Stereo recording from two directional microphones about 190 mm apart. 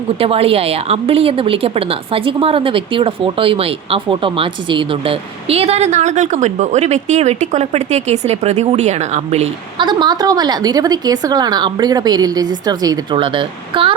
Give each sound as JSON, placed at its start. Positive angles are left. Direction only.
{"t": 0.2, "sound": "a woman's voice", "side_deg": -30}
{"t": 9.8, "sound": "a woman's voice", "side_deg": -25}